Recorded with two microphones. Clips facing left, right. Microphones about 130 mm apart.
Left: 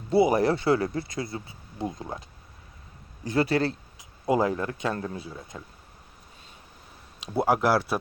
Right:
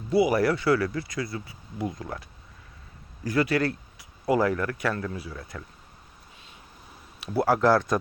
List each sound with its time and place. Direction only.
0.1 s speech: 25° left (ahead or behind)
3.2 s speech: 30° left (ahead or behind)
7.2 s speech: 15° left (ahead or behind)